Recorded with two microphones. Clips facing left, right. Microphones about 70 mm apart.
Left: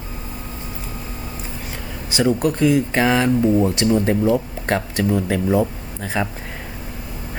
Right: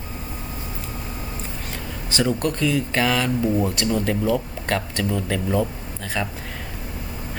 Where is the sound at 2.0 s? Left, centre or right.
Centre.